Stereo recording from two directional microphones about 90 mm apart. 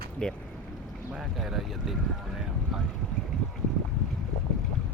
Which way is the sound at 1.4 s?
Centre (ahead or behind).